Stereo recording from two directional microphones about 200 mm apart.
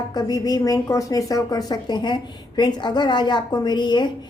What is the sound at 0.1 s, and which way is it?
A woman's voice, 20° left (ahead or behind).